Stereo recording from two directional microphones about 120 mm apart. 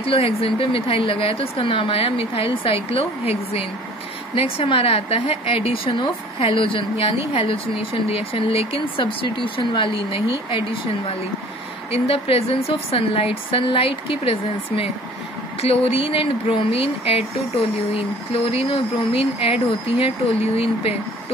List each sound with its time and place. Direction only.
0.0 s a woman's voice: 55° left (ahead or behind)
11.9 s a woman's voice: 55° left (ahead or behind)